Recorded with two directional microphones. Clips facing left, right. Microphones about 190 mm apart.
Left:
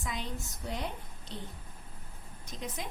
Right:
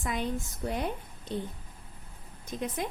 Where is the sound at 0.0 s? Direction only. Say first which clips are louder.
Right 7 dB; 55° right (ahead or behind).